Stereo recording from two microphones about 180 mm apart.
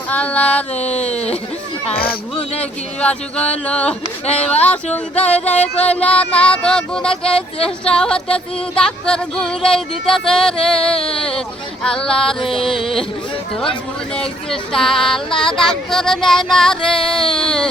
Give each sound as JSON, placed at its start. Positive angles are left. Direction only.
{"t": 0.1, "sound": "speech", "side_deg": 5}
{"t": 0.8, "sound": "speech", "side_deg": 40}
{"t": 1.1, "sound": "chatter", "side_deg": 35}
{"t": 2.6, "sound": "speech", "side_deg": 5}
{"t": 5.9, "sound": "music", "side_deg": 5}
{"t": 10.9, "sound": "speech", "side_deg": 30}
{"t": 11.2, "sound": "music", "side_deg": 5}
{"t": 14.2, "sound": "music", "side_deg": 5}